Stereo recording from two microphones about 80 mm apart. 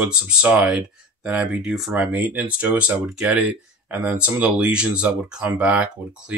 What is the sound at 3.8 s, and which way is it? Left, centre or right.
Speech, right.